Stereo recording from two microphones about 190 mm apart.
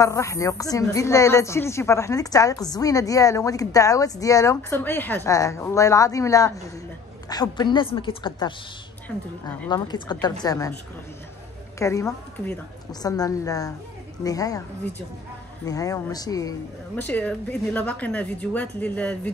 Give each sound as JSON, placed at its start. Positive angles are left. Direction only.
{"t": 0.0, "sound": "a woman's voice", "side_deg": 15}
{"t": 9.7, "sound": "a woman's voice", "side_deg": 25}
{"t": 11.8, "sound": "a woman's voice", "side_deg": 15}
{"t": 15.6, "sound": "a woman's voice", "side_deg": 20}